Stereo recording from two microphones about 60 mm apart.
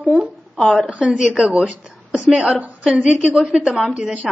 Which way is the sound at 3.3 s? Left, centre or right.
Centre.